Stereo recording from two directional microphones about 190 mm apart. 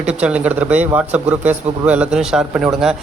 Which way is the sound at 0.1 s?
5° right (ahead or behind).